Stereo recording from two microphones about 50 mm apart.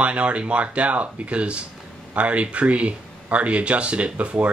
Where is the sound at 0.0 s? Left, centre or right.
Right.